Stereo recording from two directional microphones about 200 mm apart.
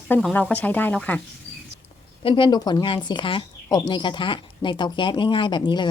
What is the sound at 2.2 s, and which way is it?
A woman's voice, 25° left (ahead or behind).